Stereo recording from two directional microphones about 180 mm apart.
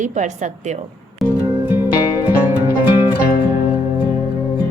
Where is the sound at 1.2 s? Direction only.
Centre (ahead or behind).